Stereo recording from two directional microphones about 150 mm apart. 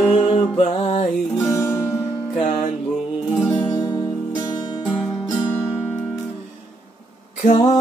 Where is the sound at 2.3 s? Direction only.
55° left (ahead or behind).